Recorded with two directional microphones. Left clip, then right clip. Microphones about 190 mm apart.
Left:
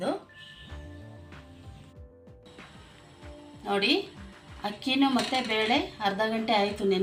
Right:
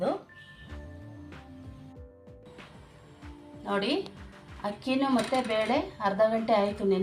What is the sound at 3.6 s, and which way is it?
Speech, 10° right (ahead or behind).